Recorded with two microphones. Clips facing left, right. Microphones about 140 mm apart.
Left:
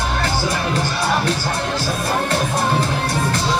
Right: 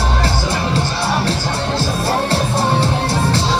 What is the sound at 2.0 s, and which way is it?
Music, 30° right (ahead or behind).